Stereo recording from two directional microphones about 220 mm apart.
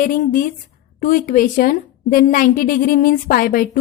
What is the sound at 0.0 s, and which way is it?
A woman's voice, 35° left (ahead or behind).